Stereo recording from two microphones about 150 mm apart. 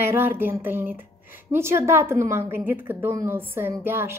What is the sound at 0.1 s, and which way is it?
A woman's voice, 15° right (ahead or behind).